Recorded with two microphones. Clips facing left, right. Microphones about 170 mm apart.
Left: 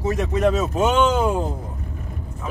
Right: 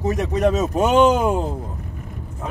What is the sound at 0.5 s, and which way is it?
Speech, 40° right (ahead or behind).